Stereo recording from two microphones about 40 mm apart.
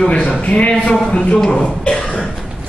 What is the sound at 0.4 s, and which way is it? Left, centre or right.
A man's voice, left.